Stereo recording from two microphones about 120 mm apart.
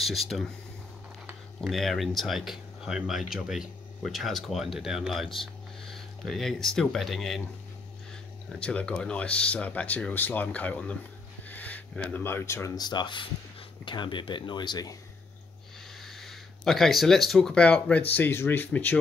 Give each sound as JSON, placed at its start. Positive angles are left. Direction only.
{"t": 0.0, "sound": "speech", "side_deg": 0}
{"t": 1.6, "sound": "speech", "side_deg": 0}
{"t": 12.7, "sound": "speech", "side_deg": 35}
{"t": 16.0, "sound": "speech", "side_deg": 0}